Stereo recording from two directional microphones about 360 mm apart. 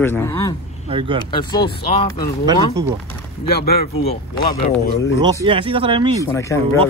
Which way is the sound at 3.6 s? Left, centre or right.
Left.